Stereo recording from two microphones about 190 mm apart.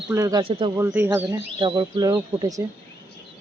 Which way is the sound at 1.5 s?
25° right (ahead or behind).